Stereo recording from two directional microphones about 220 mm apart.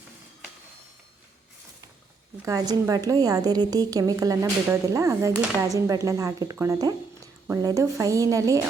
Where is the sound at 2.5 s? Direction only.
15° right (ahead or behind).